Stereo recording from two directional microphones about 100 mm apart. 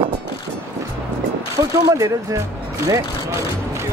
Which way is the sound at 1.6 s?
30° right (ahead or behind).